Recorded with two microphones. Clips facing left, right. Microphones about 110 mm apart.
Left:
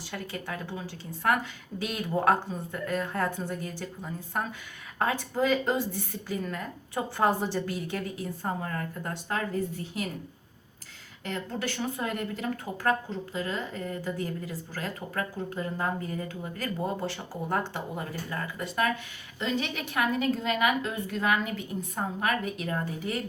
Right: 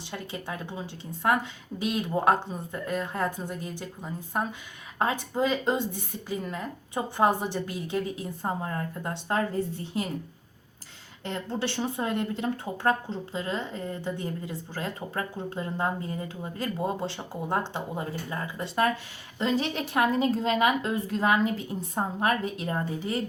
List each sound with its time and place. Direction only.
0.1 s a woman's voice: 20° right (ahead or behind)
9.3 s speech: 30° right (ahead or behind)
11.3 s a woman's voice: 30° right (ahead or behind)